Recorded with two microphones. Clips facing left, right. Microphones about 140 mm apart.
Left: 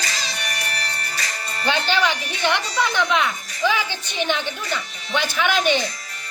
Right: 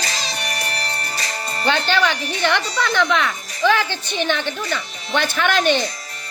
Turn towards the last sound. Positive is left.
turn(degrees=10)  # may be behind; listen again after turning